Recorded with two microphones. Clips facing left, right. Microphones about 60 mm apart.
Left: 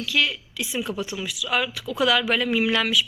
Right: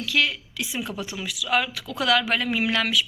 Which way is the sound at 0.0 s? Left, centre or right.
Right.